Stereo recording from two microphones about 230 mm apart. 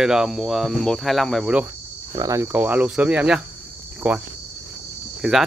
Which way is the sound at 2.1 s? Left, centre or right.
Centre.